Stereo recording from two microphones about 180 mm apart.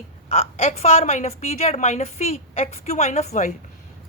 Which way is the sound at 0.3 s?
35° left (ahead or behind).